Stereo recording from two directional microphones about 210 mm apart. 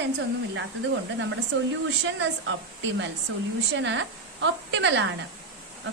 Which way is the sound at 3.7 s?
60° right (ahead or behind).